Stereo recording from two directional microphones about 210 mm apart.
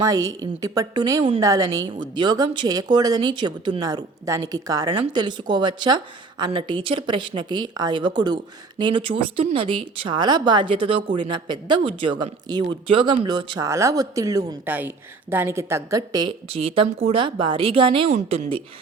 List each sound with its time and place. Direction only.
0.0 s a woman's voice: 15° right (ahead or behind)